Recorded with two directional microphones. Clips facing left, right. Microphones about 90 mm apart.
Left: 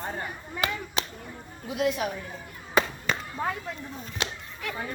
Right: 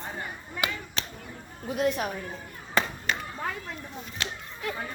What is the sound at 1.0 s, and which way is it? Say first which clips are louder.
Whip: left 8 dB; 15° left (ahead or behind).